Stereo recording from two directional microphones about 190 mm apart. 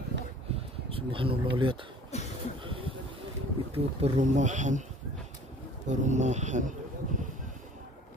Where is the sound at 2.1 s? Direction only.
35° left (ahead or behind).